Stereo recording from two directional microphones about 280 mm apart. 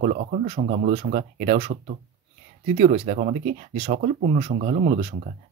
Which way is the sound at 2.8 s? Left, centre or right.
Right.